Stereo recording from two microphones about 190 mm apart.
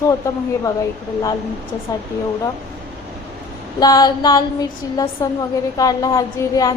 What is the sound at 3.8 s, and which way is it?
A woman's voice, 20° left (ahead or behind).